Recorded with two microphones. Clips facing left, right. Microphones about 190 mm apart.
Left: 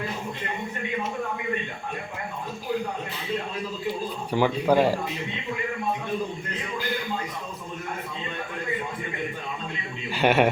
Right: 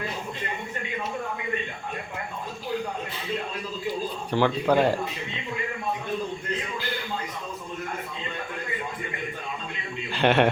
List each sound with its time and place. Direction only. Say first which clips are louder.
4.3 s speech: left 1 dB; 10° left (ahead or behind)
10.1 s a man's voice: even; 5° left (ahead or behind)